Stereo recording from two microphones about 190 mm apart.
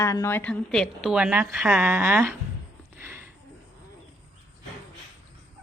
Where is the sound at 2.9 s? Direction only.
10° right (ahead or behind).